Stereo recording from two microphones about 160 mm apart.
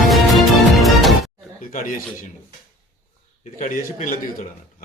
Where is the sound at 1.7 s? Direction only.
55° left (ahead or behind).